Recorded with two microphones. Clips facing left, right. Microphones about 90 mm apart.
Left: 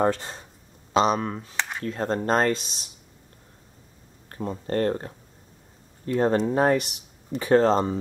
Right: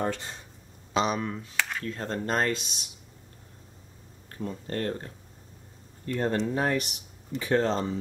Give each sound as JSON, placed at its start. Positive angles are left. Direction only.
{"t": 0.0, "sound": "speech", "side_deg": 40}
{"t": 1.6, "sound": "a sound", "side_deg": 20}
{"t": 1.9, "sound": "speech", "side_deg": 35}
{"t": 4.3, "sound": "speech", "side_deg": 40}
{"t": 6.2, "sound": "speech", "side_deg": 35}